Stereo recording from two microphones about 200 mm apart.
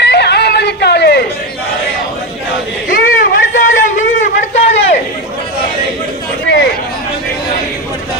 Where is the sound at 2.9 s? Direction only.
45° left (ahead or behind).